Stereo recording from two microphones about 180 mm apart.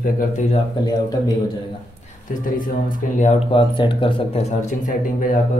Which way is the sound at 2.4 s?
50° left (ahead or behind).